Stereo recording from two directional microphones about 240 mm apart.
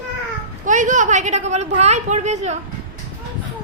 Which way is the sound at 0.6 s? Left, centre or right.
Right.